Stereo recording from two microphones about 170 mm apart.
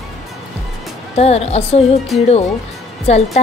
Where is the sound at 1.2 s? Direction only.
35° left (ahead or behind).